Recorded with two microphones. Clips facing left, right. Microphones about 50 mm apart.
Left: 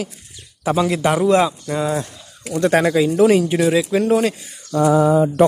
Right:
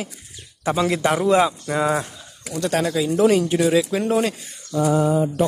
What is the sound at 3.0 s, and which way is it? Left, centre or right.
Speech, centre.